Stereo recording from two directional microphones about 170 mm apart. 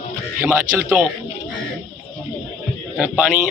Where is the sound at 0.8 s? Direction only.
5° right (ahead or behind).